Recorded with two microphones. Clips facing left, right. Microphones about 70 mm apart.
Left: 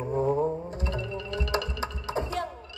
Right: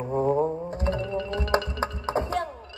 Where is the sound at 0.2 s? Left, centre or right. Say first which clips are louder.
Right 2 dB; right.